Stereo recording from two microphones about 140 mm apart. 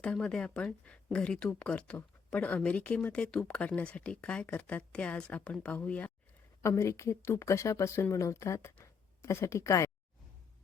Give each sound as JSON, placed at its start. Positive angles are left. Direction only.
{"t": 0.0, "sound": "speech", "side_deg": 5}